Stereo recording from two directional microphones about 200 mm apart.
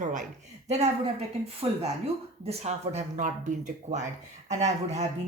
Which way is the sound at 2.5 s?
30° right (ahead or behind).